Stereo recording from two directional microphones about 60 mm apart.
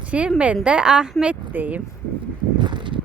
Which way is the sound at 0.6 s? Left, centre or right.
Centre.